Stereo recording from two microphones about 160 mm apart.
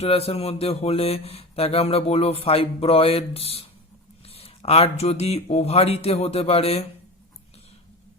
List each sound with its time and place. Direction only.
0.0 s speech: 40° left (ahead or behind)